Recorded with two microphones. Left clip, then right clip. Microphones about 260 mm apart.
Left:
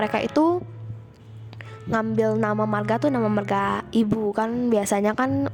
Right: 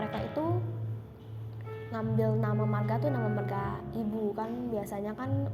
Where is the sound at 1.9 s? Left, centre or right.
Left.